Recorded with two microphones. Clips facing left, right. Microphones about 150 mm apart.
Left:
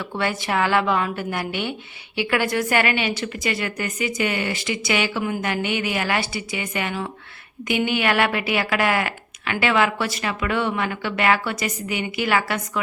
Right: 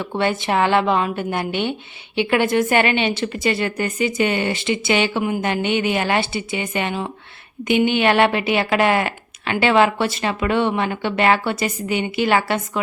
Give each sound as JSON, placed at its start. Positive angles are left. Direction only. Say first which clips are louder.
{"t": 0.0, "sound": "a woman's voice", "louder": "right 4 dB", "side_deg": -25}